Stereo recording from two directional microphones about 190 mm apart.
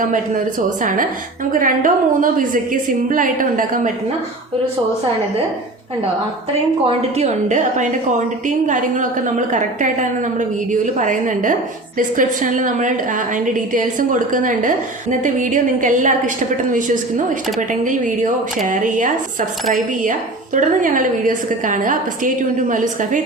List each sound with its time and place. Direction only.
0.0 s a woman's voice: 45° right (ahead or behind)
6.8 s a woman's voice: 35° right (ahead or behind)